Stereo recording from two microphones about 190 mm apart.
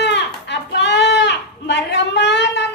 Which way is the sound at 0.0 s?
65° left (ahead or behind).